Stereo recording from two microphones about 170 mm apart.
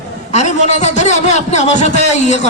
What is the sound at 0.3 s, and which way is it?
A man's voice, 40° left (ahead or behind).